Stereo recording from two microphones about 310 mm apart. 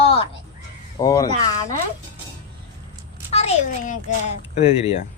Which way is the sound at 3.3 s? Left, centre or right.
Left.